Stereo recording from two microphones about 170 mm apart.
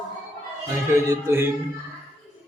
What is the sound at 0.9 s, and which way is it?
Music, 15° right (ahead or behind).